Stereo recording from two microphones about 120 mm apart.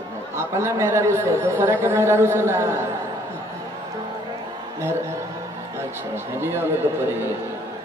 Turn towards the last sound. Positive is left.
turn(degrees=-20)  # may be behind; listen again after turning